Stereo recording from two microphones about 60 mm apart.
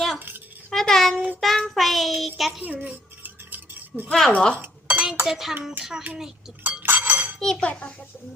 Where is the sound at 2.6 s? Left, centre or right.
Right.